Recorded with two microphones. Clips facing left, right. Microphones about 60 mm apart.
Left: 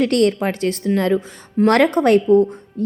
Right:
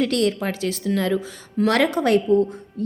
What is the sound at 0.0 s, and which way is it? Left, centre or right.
A woman's voice, left.